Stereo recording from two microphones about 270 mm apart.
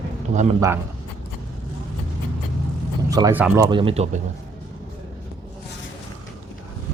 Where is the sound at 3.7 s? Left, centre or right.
Centre.